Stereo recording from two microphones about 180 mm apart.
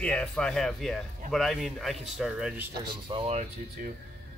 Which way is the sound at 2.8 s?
25° right (ahead or behind).